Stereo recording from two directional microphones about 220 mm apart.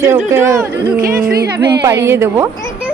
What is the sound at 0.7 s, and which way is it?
Speech, 45° right (ahead or behind).